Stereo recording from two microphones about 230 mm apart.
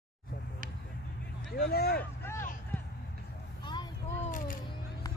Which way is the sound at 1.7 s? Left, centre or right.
Left.